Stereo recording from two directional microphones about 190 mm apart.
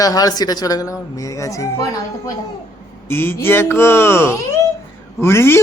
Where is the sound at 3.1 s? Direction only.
10° left (ahead or behind).